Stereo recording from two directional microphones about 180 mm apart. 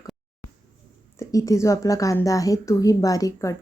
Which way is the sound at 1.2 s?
15° left (ahead or behind).